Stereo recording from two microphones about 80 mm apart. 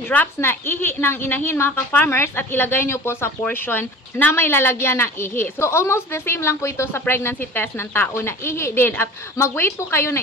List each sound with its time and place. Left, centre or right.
0.4 s a woman's voice: left